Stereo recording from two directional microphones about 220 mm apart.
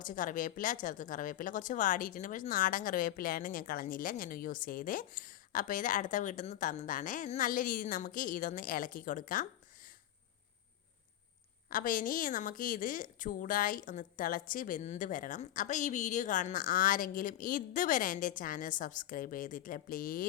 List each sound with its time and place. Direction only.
0.0 s speech: 35° left (ahead or behind)
11.7 s speech: 40° left (ahead or behind)